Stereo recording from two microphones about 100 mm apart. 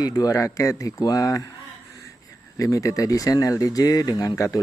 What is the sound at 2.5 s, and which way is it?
Speech, 35° left (ahead or behind).